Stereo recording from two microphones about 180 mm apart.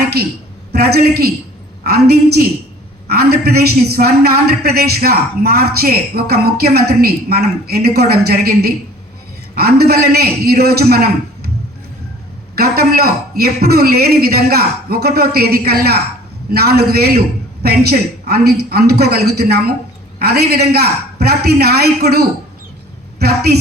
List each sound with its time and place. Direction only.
0.0 s a sound: 65° right (ahead or behind)
0.7 s a woman's voice: 60° right (ahead or behind)
12.5 s a woman's voice: 60° right (ahead or behind)